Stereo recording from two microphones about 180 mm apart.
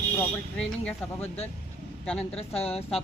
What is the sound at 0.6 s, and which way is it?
Speech, 5° left (ahead or behind).